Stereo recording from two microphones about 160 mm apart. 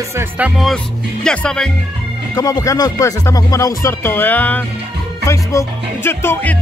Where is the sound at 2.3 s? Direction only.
20° left (ahead or behind).